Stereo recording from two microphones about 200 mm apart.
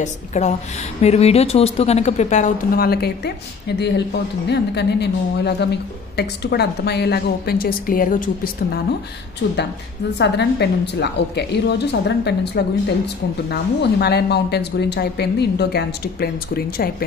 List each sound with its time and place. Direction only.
0.0 s a woman's voice: 35° left (ahead or behind)
10.1 s a woman's voice: 60° left (ahead or behind)